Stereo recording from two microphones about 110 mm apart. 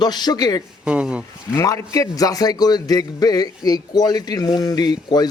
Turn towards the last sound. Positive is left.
turn(degrees=40)  # may be behind; listen again after turning